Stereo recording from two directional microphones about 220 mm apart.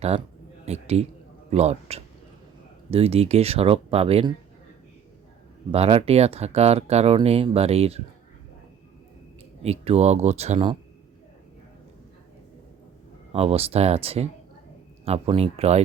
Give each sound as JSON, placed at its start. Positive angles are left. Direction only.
{"t": 0.6, "sound": "a man's voice", "side_deg": -30}
{"t": 5.7, "sound": "speech", "side_deg": -25}
{"t": 9.6, "sound": "speech", "side_deg": -30}
{"t": 13.3, "sound": "speech", "side_deg": -25}